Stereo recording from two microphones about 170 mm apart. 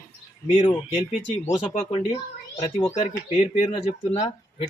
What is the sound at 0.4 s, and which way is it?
Speech, 35° left (ahead or behind).